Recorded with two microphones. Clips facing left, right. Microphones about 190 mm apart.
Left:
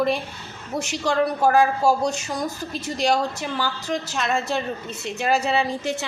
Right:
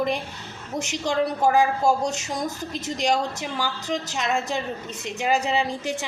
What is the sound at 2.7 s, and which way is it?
A woman's voice, 15° right (ahead or behind).